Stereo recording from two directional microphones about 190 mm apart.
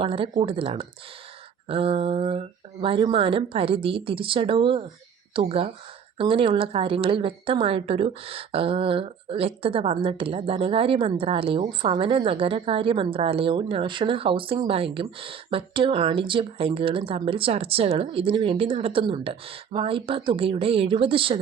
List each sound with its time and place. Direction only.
0.0 s a woman's voice: 30° right (ahead or behind)